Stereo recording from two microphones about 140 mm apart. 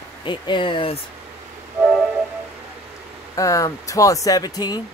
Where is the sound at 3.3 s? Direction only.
25° left (ahead or behind).